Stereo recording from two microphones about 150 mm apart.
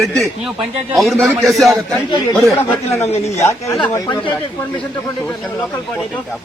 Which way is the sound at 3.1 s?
45° left (ahead or behind).